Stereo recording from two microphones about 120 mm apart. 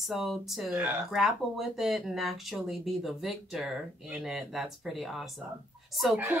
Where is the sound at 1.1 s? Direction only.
5° right (ahead or behind).